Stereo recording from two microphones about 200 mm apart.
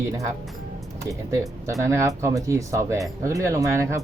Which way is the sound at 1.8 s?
15° right (ahead or behind).